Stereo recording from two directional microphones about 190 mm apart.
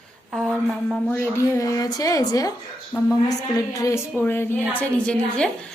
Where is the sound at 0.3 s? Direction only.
Centre (ahead or behind); by 2.5 s 20° left (ahead or behind).